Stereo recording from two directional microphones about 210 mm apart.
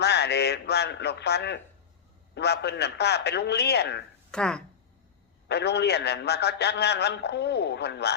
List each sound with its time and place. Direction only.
0.0 s a man's voice: 50° left (ahead or behind)
4.3 s speech: 5° left (ahead or behind)
5.5 s a man's voice: 50° left (ahead or behind)